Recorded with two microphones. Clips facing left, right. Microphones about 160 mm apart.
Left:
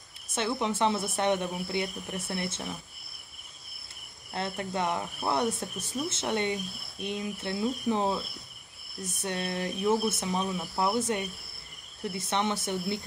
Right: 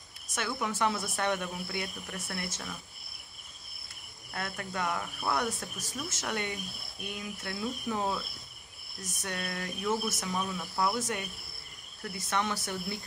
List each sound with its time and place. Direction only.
0.3 s speech: 25° left (ahead or behind)
4.3 s speech: 25° left (ahead or behind)